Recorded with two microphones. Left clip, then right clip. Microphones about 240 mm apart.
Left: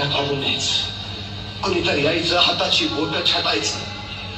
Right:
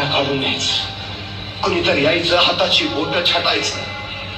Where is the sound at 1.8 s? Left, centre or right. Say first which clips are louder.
Right 4 dB; right.